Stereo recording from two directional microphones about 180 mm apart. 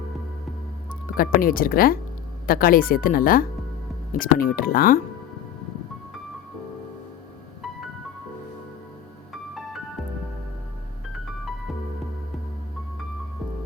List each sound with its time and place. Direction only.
1.1 s speech: 50° left (ahead or behind)
9.3 s music: centre (ahead or behind)